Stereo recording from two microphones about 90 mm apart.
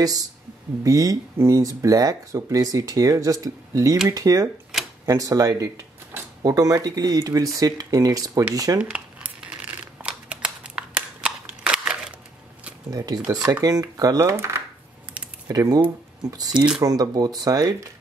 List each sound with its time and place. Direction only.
0.0 s speech: 40° right (ahead or behind)
8.7 s crumpling: 15° right (ahead or behind)
10.0 s a sound: 10° right (ahead or behind)
12.9 s speech: 45° right (ahead or behind)